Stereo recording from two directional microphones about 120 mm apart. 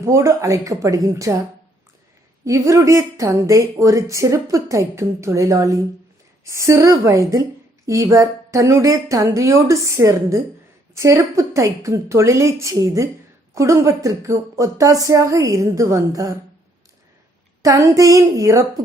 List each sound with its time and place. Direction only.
0.0 s speech: 25° right (ahead or behind)
2.4 s speech: 25° right (ahead or behind)
17.6 s speech: 30° right (ahead or behind)